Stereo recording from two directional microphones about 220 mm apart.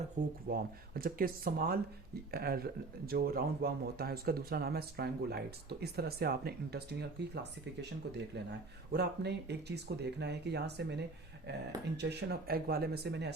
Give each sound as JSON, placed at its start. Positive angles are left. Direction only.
{"t": 0.4, "sound": "speech", "side_deg": -40}
{"t": 8.9, "sound": "speech", "side_deg": -50}